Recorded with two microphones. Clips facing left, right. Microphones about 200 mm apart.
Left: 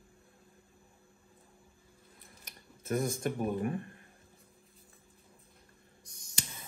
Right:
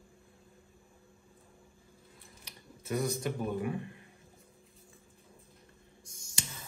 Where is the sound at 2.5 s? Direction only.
50° left (ahead or behind).